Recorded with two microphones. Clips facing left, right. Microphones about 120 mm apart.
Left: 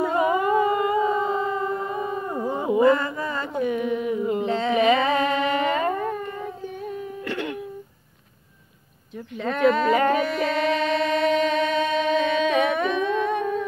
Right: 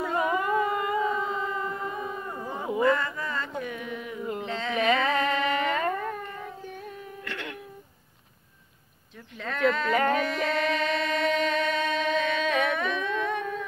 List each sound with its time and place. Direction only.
0.0 s howl: 10° left (ahead or behind)
1.0 s a sound: 35° left (ahead or behind)
2.2 s howl: 20° left (ahead or behind)
2.8 s mantra: 20° left (ahead or behind)
4.3 s music: 15° left (ahead or behind)
7.2 s a sound: 20° left (ahead or behind)
9.4 s a sound: 15° left (ahead or behind)
11.3 s music: centre (ahead or behind)
12.7 s humming: 20° left (ahead or behind)